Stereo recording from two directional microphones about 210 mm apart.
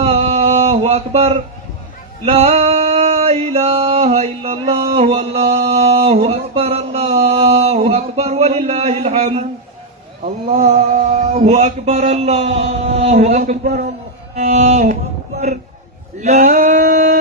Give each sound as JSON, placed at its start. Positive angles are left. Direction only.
{"t": 0.0, "sound": "a sound", "side_deg": -30}
{"t": 2.2, "sound": "male singing", "side_deg": -30}
{"t": 4.9, "sound": "mantra", "side_deg": -30}
{"t": 10.5, "sound": "speech", "side_deg": -30}
{"t": 13.7, "sound": "a man's voice", "side_deg": -50}
{"t": 14.3, "sound": "speech", "side_deg": -35}
{"t": 16.2, "sound": "speech", "side_deg": -35}
{"t": 16.8, "sound": "a sound", "side_deg": -40}